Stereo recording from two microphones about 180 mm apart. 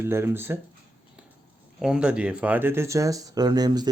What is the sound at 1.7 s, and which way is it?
Speech, 5° right (ahead or behind).